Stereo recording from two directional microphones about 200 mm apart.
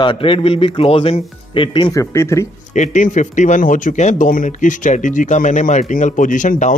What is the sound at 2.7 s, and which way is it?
Speech, 40° left (ahead or behind).